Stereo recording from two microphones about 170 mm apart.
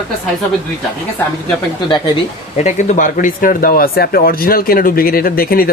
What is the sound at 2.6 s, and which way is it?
Speech, 45° left (ahead or behind).